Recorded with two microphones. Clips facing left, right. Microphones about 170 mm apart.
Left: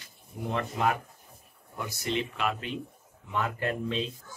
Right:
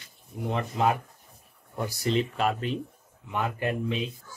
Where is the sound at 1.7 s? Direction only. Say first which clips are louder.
Right 5 dB; 35° right (ahead or behind).